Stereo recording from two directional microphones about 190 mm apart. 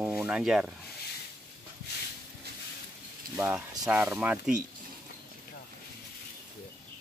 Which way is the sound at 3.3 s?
10° right (ahead or behind).